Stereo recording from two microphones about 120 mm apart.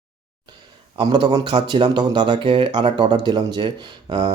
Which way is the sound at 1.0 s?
35° right (ahead or behind).